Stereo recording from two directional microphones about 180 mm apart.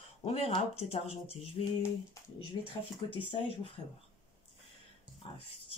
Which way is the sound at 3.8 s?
25° left (ahead or behind).